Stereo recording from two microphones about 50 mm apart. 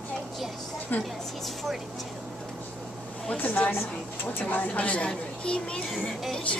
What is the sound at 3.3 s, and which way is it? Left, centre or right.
A woman's voice, left.